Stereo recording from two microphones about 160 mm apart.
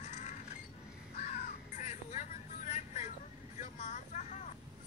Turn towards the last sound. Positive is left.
turn(degrees=50)  # may be behind; listen again after turning